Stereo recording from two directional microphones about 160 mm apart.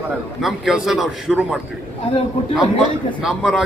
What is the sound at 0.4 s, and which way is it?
A man's voice, centre (ahead or behind).